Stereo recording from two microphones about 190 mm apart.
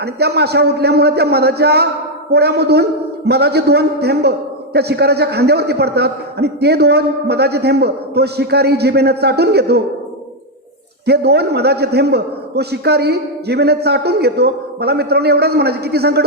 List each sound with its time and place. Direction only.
0.0 s a man's voice: 60° right (ahead or behind)
11.0 s a man's voice: 60° right (ahead or behind)